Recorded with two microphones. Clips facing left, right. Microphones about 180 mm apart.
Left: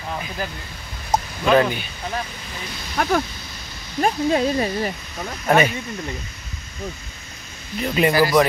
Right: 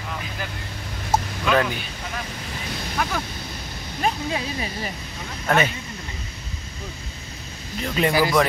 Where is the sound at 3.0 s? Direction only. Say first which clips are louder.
Left 7 dB; 50° left (ahead or behind).